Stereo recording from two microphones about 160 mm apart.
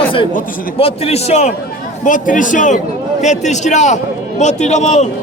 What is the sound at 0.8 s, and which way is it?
A man's voice, 35° left (ahead or behind).